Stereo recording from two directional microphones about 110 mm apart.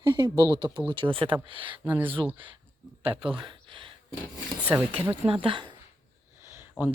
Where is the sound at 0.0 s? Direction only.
40° right (ahead or behind).